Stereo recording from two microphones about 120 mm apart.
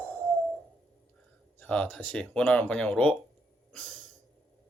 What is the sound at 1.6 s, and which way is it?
Speech, 15° left (ahead or behind).